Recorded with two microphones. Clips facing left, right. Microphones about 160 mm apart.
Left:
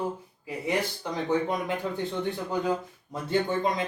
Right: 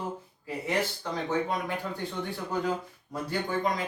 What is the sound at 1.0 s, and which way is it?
Speech, 15° left (ahead or behind).